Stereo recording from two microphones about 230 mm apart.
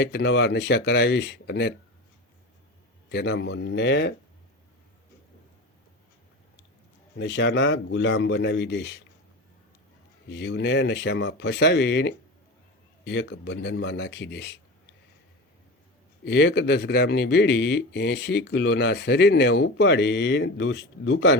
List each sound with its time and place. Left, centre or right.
0.0 s speech: left
3.1 s speech: left
7.2 s speech: left
10.2 s speech: left
16.2 s speech: left